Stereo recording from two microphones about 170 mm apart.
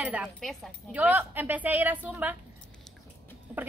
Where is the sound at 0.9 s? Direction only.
10° right (ahead or behind).